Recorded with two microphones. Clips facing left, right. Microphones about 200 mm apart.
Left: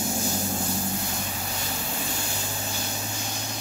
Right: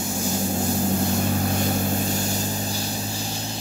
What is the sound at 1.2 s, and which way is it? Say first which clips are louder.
Vehicle: right 11 dB; 50° right (ahead or behind).